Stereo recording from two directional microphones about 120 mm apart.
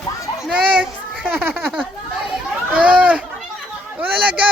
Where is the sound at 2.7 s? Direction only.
10° right (ahead or behind).